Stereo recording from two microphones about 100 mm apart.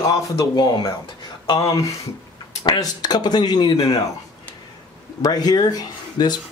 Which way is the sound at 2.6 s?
45° left (ahead or behind).